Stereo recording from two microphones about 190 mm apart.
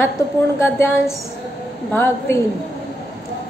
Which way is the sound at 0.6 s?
15° left (ahead or behind).